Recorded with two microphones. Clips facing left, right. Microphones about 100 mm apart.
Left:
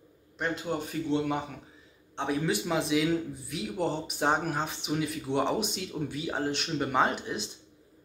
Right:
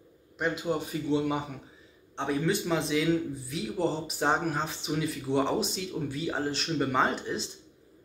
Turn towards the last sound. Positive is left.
turn(degrees=5)  # may be behind; listen again after turning